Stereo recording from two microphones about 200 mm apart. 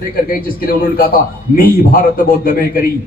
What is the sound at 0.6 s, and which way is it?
A man's voice, 45° left (ahead or behind).